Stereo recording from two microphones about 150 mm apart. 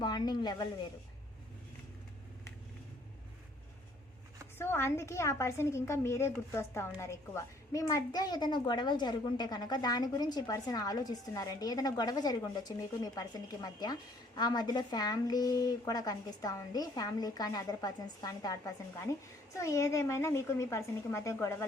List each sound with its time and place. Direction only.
0.0 s a woman's voice: 30° left (ahead or behind)
4.5 s a woman's voice: 15° left (ahead or behind)